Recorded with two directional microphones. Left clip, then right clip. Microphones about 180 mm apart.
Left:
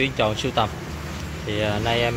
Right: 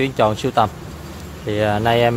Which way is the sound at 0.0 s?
30° right (ahead or behind).